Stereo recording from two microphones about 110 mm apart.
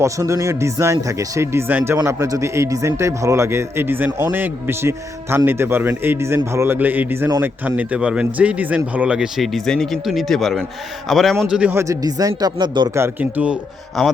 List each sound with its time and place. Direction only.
0.0 s a man's voice: 30° right (ahead or behind); by 11.7 s 10° right (ahead or behind)
11.7 s a man's voice: 25° right (ahead or behind)
12.4 s speech: 40° right (ahead or behind)
13.0 s speech: 15° right (ahead or behind)
14.0 s speech: centre (ahead or behind)